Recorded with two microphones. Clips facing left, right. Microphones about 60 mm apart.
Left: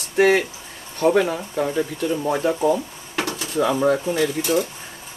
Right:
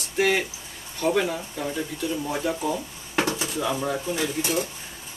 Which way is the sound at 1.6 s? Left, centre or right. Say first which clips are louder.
Left 10 dB; left.